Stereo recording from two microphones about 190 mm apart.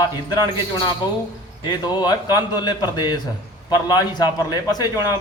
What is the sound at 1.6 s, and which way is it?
A man's voice, 20° left (ahead or behind).